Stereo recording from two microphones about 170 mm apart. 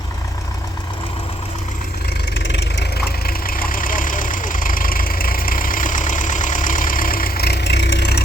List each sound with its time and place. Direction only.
2.3 s vehicle: 90° left